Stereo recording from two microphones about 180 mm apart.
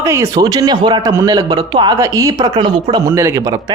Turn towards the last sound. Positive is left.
turn(degrees=-20)  # may be behind; listen again after turning